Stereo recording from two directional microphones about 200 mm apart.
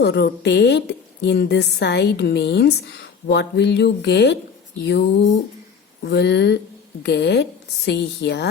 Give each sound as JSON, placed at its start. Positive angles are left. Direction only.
{"t": 0.0, "sound": "a woman's voice", "side_deg": 55}